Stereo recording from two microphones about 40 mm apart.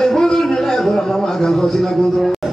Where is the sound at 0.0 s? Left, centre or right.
Centre.